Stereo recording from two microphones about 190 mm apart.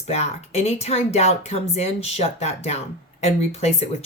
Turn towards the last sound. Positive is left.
turn(degrees=35)  # may be behind; listen again after turning